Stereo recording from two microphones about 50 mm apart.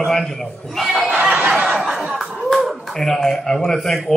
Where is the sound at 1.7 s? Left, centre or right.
Centre.